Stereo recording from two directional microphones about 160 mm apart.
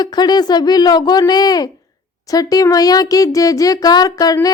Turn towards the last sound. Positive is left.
turn(degrees=25)  # may be behind; listen again after turning